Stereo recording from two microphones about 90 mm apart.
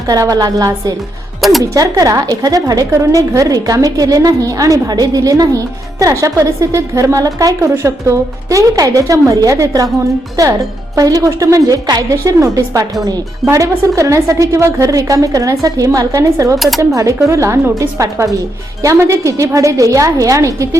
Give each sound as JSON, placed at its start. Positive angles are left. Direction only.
{"t": 0.1, "sound": "a woman's voice", "side_deg": -45}
{"t": 7.7, "sound": "a woman's voice", "side_deg": -30}
{"t": 10.9, "sound": "a woman's voice", "side_deg": -40}
{"t": 16.6, "sound": "speech", "side_deg": 0}
{"t": 16.9, "sound": "a woman's voice", "side_deg": -35}